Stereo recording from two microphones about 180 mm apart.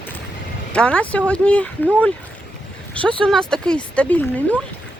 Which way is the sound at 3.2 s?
5° left (ahead or behind).